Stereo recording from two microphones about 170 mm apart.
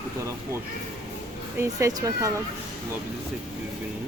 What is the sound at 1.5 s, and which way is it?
Speech, 20° right (ahead or behind).